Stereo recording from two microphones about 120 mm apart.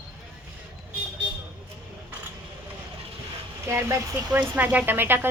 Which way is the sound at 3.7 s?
20° right (ahead or behind).